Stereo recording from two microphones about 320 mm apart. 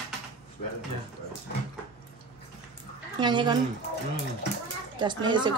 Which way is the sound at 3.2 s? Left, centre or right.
Centre.